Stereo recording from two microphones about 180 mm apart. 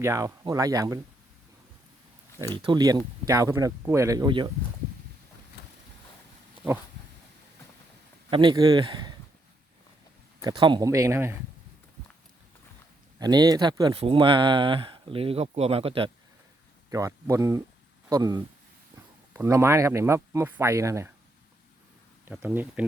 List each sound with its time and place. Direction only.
0.0 s speech: 15° right (ahead or behind)
2.6 s speech: 25° right (ahead or behind)
8.3 s speech: 25° right (ahead or behind)
10.4 s speech: 25° right (ahead or behind)
13.1 s speech: 20° right (ahead or behind)
13.9 s speech: 30° right (ahead or behind)
16.9 s speech: 20° right (ahead or behind)
22.3 s speech: 10° right (ahead or behind)